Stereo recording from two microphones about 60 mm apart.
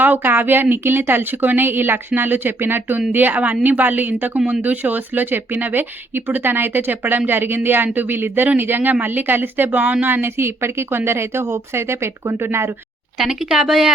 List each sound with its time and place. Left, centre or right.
0.0 s speech: right
13.1 s a woman's voice: centre